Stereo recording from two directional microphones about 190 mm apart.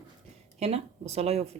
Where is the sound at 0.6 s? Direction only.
35° right (ahead or behind).